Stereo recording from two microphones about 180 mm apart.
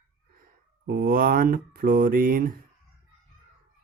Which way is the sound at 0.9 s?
55° right (ahead or behind).